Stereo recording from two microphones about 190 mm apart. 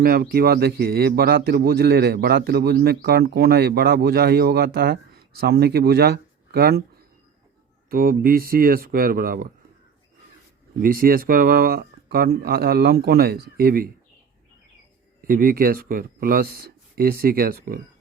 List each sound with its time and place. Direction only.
0.0 s a man's voice: 55° right (ahead or behind)
7.9 s speech: 50° right (ahead or behind)
10.8 s speech: 50° right (ahead or behind)
15.3 s speech: 50° right (ahead or behind)